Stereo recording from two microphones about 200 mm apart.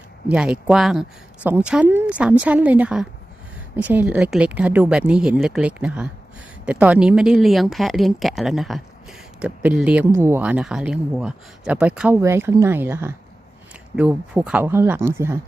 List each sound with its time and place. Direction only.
0.3 s speech: 5° right (ahead or behind)